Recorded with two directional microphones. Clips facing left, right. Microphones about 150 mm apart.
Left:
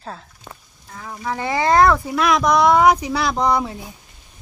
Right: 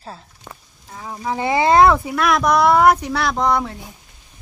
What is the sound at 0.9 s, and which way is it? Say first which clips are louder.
Speech: right 2 dB; 20° right (ahead or behind).